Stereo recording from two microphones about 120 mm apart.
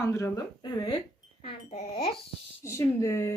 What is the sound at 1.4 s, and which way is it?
Speech, 65° left (ahead or behind).